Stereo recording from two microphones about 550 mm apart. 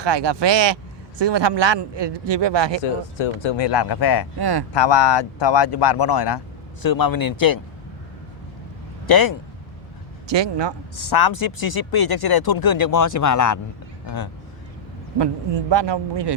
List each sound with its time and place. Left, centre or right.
0.0 s speech: right
3.2 s speech: left
4.4 s speech: right
4.7 s speech: left
9.0 s speech: left
10.2 s speech: right
10.9 s speech: left
15.2 s speech: right